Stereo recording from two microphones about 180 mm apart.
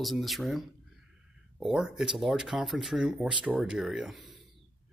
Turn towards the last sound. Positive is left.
turn(degrees=0)  # may be behind; listen again after turning